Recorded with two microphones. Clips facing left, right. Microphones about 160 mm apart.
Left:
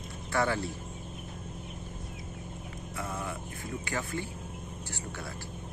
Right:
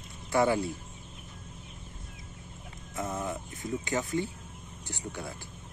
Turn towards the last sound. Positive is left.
turn(degrees=-20)  # may be behind; listen again after turning